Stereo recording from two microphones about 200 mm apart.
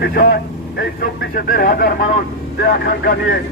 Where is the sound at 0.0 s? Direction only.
55° left (ahead or behind).